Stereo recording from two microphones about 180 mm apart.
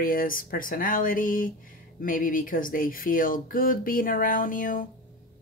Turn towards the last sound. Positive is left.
turn(degrees=50)  # may be behind; listen again after turning